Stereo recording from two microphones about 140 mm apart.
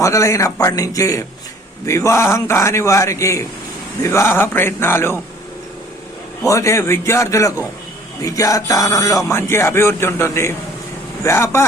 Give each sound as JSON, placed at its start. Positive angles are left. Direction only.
{"t": 0.0, "sound": "speech", "side_deg": 20}
{"t": 4.0, "sound": "a sound", "side_deg": 20}
{"t": 6.4, "sound": "speech", "side_deg": 20}